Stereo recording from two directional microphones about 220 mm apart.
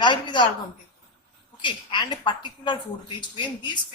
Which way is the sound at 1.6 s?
20° left (ahead or behind).